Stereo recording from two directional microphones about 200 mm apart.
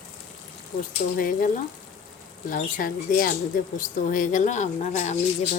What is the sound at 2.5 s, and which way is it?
Speech, 45° left (ahead or behind).